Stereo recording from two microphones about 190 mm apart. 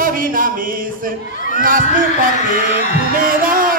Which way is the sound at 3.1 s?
45° right (ahead or behind).